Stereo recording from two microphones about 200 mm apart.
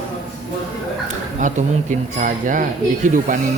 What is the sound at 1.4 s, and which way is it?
Speech, 40° right (ahead or behind).